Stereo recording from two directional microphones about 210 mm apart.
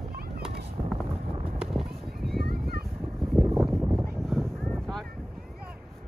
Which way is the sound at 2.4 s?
45° right (ahead or behind).